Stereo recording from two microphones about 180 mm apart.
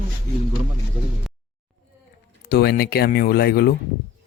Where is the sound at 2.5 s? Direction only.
60° left (ahead or behind).